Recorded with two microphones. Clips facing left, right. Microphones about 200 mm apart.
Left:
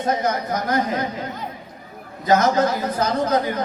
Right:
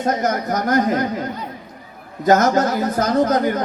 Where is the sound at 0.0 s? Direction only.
45° right (ahead or behind).